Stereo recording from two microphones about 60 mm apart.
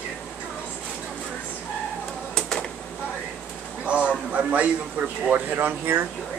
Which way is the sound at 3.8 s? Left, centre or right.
Right.